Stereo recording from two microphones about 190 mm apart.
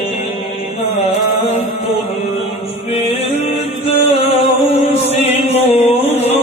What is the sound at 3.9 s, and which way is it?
Music, 35° left (ahead or behind).